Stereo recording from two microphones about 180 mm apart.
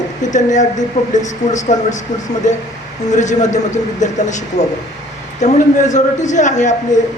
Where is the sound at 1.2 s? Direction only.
40° left (ahead or behind).